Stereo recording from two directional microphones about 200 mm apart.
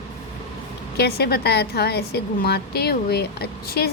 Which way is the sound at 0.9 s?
55° left (ahead or behind).